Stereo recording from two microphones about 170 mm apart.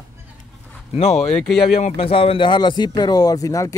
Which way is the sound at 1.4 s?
Centre (ahead or behind).